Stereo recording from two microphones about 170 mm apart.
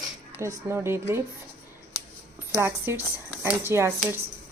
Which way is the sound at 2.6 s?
15° right (ahead or behind).